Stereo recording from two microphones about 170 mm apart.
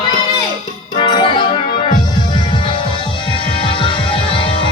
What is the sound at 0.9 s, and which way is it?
Music, 25° left (ahead or behind).